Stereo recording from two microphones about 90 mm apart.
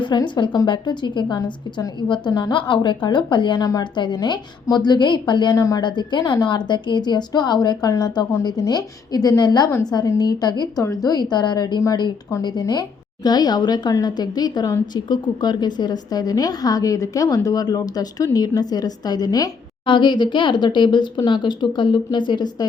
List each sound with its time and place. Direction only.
0.0 s a woman's voice: 55° left (ahead or behind)
3.6 s a woman's voice: 45° left (ahead or behind)
5.5 s a woman's voice: 40° left (ahead or behind)
5.8 s a woman's voice: 55° left (ahead or behind)
19.8 s a woman's voice: 65° left (ahead or behind)